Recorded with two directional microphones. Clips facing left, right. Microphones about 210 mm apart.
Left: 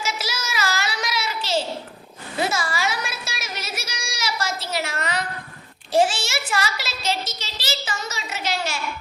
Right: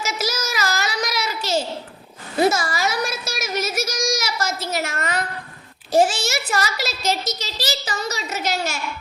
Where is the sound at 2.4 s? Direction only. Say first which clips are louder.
Right 5 dB; 40° right (ahead or behind).